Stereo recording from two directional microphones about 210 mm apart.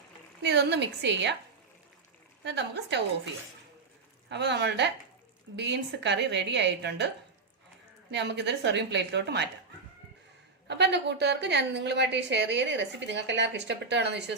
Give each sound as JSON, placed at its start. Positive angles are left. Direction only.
{"t": 0.4, "sound": "a woman's voice", "side_deg": -55}
{"t": 2.4, "sound": "a woman's voice", "side_deg": -55}
{"t": 4.3, "sound": "a woman's voice", "side_deg": -55}
{"t": 8.1, "sound": "a woman's voice", "side_deg": -55}
{"t": 10.7, "sound": "a woman's voice", "side_deg": -55}